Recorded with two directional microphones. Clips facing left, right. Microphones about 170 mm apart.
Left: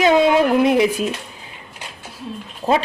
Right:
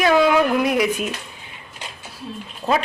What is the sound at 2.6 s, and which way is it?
Speech, 15° left (ahead or behind).